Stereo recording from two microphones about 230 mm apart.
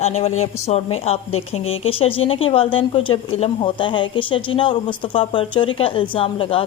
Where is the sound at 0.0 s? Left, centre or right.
Left.